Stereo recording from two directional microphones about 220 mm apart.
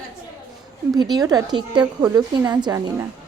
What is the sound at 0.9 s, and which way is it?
Speech, 20° right (ahead or behind).